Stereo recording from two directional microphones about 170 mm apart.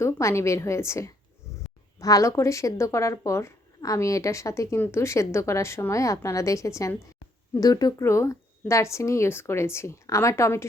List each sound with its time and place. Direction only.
0.0 s speech: 15° left (ahead or behind)